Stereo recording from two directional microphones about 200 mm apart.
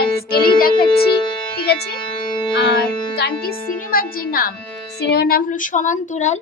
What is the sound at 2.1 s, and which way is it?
Music, 20° left (ahead or behind).